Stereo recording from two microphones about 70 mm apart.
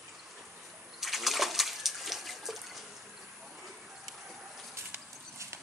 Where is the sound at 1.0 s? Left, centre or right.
Centre.